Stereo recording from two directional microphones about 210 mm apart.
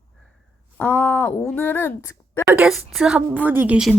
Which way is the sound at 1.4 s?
10° left (ahead or behind).